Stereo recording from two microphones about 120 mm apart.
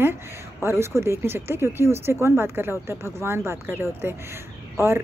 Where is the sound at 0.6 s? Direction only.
20° right (ahead or behind).